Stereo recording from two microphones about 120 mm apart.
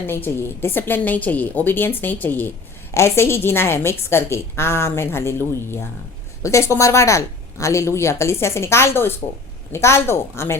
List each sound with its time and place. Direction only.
0.1 s a woman's voice: 20° left (ahead or behind)
6.4 s speech: 25° left (ahead or behind)